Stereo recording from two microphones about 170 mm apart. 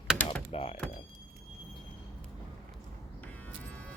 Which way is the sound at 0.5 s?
35° left (ahead or behind).